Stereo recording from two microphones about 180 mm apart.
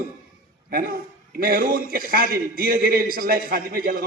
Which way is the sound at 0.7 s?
55° right (ahead or behind).